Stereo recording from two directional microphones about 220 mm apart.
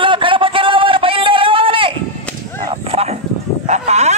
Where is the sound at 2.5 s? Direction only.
25° right (ahead or behind).